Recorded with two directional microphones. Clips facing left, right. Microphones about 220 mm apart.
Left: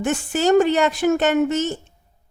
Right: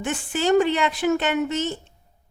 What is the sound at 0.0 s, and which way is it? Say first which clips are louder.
A woman's voice: left 4 dB; 45° left (ahead or behind).